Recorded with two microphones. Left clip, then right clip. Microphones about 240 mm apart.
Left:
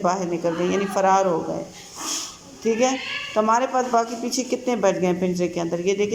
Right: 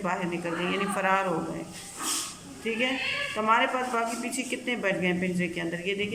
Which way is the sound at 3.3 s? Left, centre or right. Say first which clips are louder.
Left 6 dB; centre.